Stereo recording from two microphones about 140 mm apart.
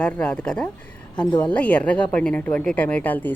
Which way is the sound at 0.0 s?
10° left (ahead or behind).